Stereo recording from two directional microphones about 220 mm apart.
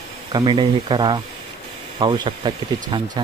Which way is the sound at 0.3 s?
20° right (ahead or behind).